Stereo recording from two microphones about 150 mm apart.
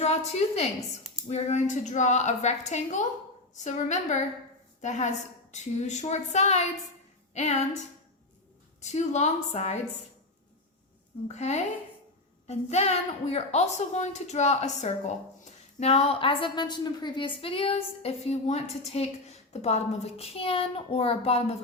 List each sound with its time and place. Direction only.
0.0 s a woman's voice: 45° left (ahead or behind)
8.8 s a woman's voice: 50° left (ahead or behind)
11.3 s a woman's voice: 50° left (ahead or behind)